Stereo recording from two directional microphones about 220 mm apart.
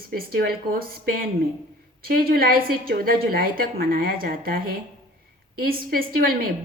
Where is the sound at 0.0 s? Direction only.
40° right (ahead or behind).